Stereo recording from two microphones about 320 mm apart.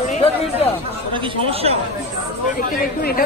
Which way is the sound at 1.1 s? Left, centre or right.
Centre.